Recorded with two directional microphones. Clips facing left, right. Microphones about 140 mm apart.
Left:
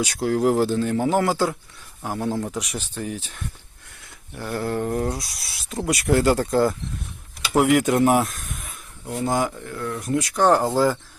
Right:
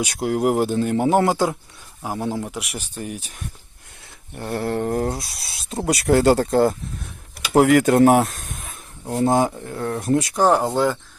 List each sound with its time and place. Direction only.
0.0 s speech: 15° right (ahead or behind)
4.4 s mantra: 25° right (ahead or behind)
7.5 s speech: 45° right (ahead or behind)
8.2 s speech: 30° right (ahead or behind)
10.3 s speech: 5° right (ahead or behind)